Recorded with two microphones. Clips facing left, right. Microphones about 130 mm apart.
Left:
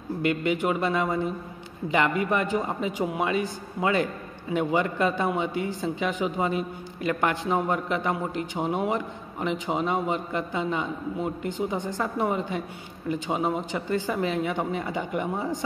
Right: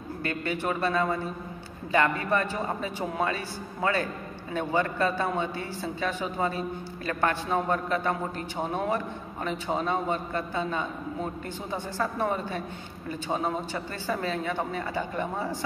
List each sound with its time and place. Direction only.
0.2 s speech: 20° left (ahead or behind)